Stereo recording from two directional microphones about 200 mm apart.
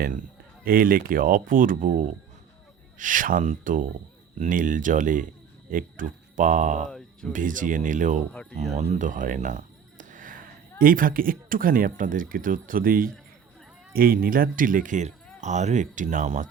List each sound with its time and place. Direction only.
0.0 s speech: 45° right (ahead or behind)
6.8 s music: 5° left (ahead or behind)
7.3 s speech: 40° right (ahead or behind)
8.3 s speech: 5° left (ahead or behind)
8.7 s speech: 35° right (ahead or behind)